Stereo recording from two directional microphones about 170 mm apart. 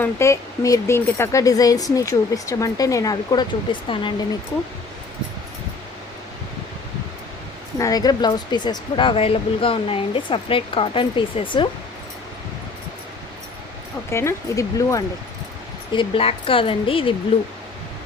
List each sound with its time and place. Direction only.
0.0 s speech: 15° left (ahead or behind)
7.8 s speech: 20° left (ahead or behind)
14.1 s speech: 15° left (ahead or behind)
15.9 s speech: 30° left (ahead or behind)